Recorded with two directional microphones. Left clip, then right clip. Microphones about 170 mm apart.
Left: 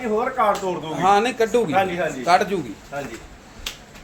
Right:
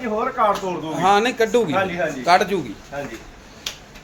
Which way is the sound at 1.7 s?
30° left (ahead or behind).